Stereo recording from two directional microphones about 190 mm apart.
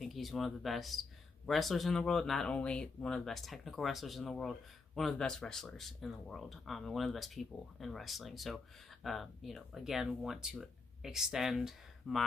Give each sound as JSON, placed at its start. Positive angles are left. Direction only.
{"t": 0.0, "sound": "speech", "side_deg": 0}